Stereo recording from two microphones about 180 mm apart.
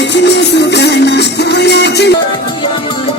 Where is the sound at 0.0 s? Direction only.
75° left (ahead or behind).